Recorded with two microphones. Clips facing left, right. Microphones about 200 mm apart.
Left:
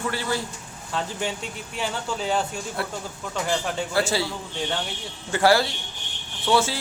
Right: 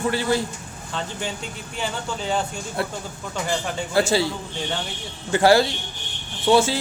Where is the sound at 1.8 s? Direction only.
Centre (ahead or behind).